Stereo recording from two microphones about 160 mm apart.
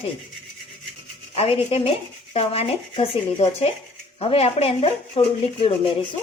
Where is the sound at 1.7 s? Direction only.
35° left (ahead or behind).